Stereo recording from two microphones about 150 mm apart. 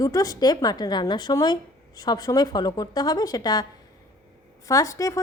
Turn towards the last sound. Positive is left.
turn(degrees=20)  # may be behind; listen again after turning